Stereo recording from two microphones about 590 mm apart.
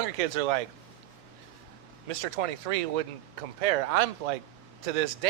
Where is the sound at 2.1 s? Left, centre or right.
Right.